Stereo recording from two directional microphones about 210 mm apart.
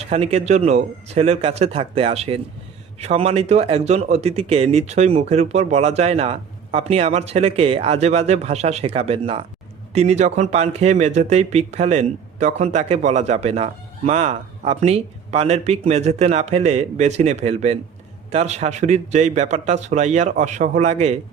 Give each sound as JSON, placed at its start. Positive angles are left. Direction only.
{"t": 0.0, "sound": "speech", "side_deg": -30}